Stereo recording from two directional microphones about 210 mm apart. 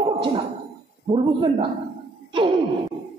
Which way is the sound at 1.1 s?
25° right (ahead or behind).